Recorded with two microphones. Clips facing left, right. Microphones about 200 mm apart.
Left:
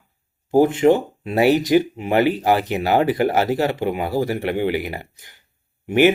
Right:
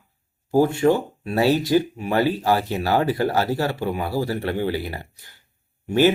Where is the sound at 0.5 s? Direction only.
20° left (ahead or behind).